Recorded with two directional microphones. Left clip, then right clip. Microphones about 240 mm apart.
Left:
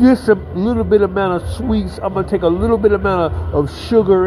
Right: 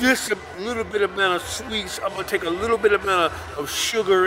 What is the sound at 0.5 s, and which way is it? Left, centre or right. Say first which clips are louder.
Speech: left 10 dB; centre.